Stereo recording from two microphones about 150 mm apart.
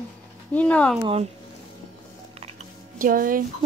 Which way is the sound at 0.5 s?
10° left (ahead or behind).